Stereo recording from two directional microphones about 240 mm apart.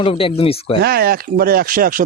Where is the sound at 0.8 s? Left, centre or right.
Right.